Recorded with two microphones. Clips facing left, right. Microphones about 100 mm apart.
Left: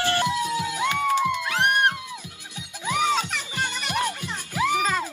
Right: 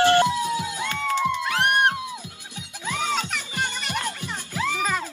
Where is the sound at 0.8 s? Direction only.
15° left (ahead or behind).